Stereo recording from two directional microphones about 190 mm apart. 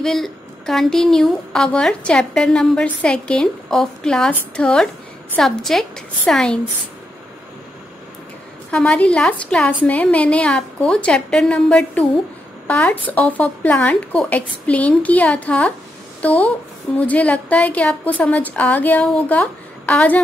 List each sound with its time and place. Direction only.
0.0 s a woman's voice: centre (ahead or behind)
8.7 s a woman's voice: 5° left (ahead or behind)